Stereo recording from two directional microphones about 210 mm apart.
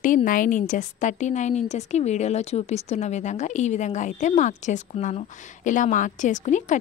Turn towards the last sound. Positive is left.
turn(degrees=35)  # may be behind; listen again after turning